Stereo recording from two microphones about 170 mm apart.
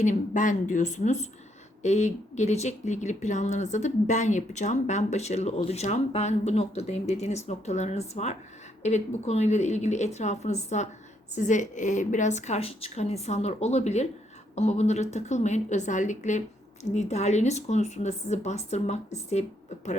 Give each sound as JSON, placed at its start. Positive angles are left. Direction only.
{"t": 0.0, "sound": "a woman's voice", "side_deg": 45}